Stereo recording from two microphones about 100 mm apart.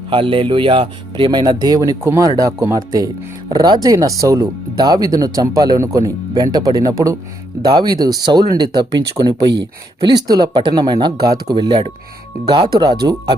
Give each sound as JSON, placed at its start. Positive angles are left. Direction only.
{"t": 0.1, "sound": "speech", "side_deg": -60}